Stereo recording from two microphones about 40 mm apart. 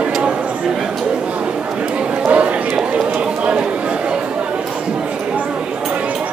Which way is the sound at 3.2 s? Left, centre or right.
Right.